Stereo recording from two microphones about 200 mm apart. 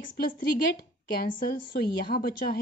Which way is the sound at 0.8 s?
50° left (ahead or behind).